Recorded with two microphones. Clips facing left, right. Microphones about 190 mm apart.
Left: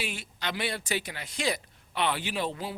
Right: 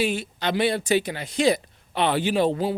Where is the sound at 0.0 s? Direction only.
30° right (ahead or behind).